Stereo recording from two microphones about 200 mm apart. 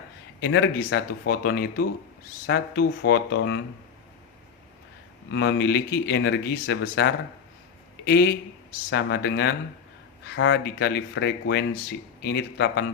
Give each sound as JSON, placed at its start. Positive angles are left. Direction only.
{"t": 0.4, "sound": "speech", "side_deg": 60}
{"t": 5.3, "sound": "speech", "side_deg": 60}